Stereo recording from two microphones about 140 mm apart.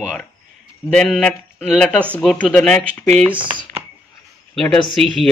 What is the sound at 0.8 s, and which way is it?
Speech, 5° left (ahead or behind).